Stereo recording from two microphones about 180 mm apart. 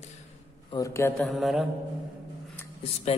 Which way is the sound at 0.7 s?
20° left (ahead or behind).